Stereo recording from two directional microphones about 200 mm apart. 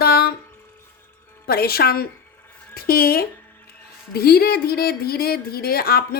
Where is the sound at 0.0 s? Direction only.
50° left (ahead or behind).